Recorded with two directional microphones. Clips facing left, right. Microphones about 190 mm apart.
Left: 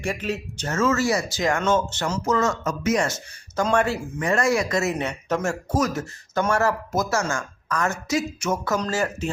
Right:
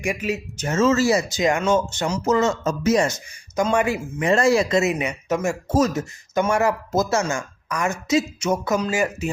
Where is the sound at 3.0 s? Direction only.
15° right (ahead or behind).